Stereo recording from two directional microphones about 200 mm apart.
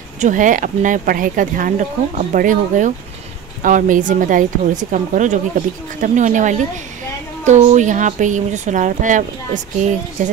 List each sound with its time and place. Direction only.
0.2 s speech: 40° right (ahead or behind)